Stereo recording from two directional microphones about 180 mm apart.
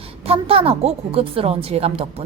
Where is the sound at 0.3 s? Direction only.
30° right (ahead or behind).